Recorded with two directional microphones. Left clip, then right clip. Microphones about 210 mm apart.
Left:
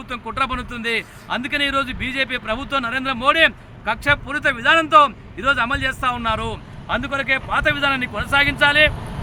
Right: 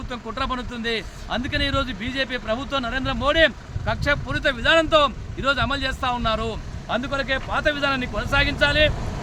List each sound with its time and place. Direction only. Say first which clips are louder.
0.1 s a man's voice: left 4 dB; 10° right (ahead or behind)
9.0 s vehicle: even; 35° right (ahead or behind)